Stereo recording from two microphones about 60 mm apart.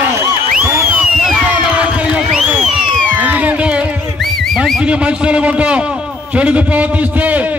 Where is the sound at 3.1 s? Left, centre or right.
Right.